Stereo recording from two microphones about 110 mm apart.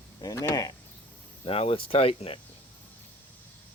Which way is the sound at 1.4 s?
60° left (ahead or behind).